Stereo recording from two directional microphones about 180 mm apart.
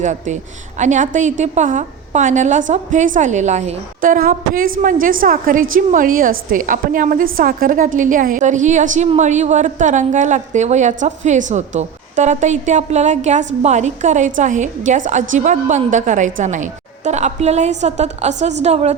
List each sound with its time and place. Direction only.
0.0 s a woman's voice: 40° right (ahead or behind)